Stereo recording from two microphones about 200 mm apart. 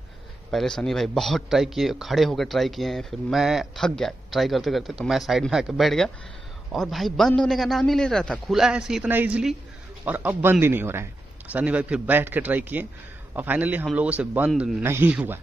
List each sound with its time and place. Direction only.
0.5 s a man's voice: centre (ahead or behind)